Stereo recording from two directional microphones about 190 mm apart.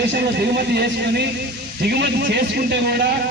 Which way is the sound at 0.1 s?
55° right (ahead or behind).